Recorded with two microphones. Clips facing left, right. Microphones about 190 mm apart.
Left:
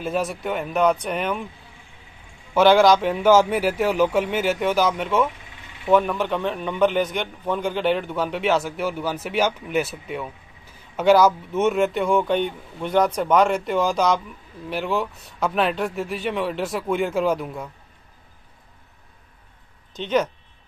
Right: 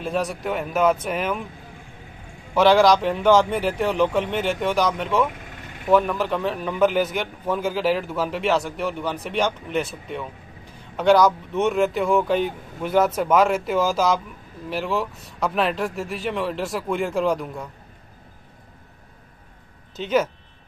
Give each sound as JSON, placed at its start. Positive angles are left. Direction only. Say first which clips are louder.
{"t": 0.0, "sound": "a man's voice", "louder": "even", "side_deg": 0}
{"t": 2.5, "sound": "a man's voice", "louder": "left 1 dB", "side_deg": 0}
{"t": 5.4, "sound": "a sound", "louder": "right 6 dB", "side_deg": -50}
{"t": 5.9, "sound": "a man's voice", "louder": "even", "side_deg": 0}
{"t": 20.0, "sound": "a man's voice", "louder": "even", "side_deg": -5}